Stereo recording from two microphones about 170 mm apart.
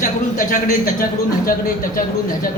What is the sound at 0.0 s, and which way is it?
A man's voice, 50° left (ahead or behind).